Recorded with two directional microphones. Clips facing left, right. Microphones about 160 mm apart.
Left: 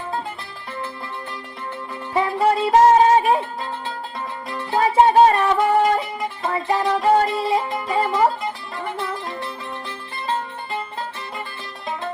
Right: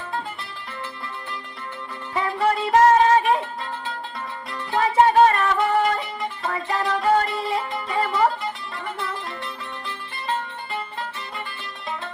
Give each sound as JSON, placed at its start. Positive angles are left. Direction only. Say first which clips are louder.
{"t": 2.4, "sound": "music", "louder": "left 2 dB", "side_deg": 25}
{"t": 10.2, "sound": "music", "louder": "left 2 dB", "side_deg": 25}